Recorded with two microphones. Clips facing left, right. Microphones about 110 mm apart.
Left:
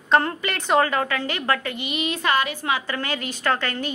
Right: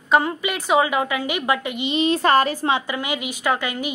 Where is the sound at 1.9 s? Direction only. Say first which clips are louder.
Right 6 dB; 30° right (ahead or behind).